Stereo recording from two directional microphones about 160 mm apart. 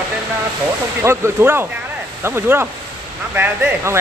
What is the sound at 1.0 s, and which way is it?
Speech, 15° right (ahead or behind).